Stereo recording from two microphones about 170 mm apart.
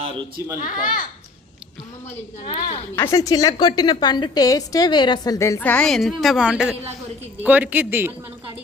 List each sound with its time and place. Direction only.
0.6 s a child's voice: 55° left (ahead or behind)
2.4 s a woman's voice: 35° left (ahead or behind)
2.9 s a woman's voice: 15° left (ahead or behind); by 8.1 s 10° right (ahead or behind)